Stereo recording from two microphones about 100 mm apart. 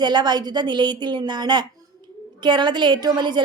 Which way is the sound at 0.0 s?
45° right (ahead or behind).